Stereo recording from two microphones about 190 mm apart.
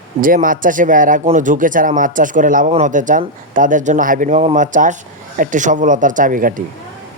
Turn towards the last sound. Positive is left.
turn(degrees=-45)  # may be behind; listen again after turning